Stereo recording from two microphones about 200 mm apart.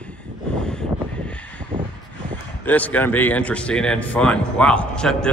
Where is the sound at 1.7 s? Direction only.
25° right (ahead or behind).